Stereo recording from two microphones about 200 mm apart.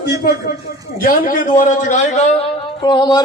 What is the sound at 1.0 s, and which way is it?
A man's voice, 45° left (ahead or behind).